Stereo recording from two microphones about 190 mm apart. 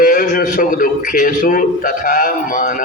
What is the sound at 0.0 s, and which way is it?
A man's voice, 45° left (ahead or behind).